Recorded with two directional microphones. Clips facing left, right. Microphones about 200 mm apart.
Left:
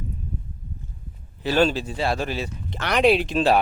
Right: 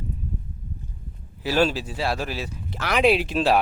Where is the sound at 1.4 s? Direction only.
5° right (ahead or behind).